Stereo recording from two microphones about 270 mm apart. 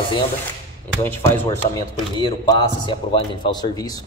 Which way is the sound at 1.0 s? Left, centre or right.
Centre.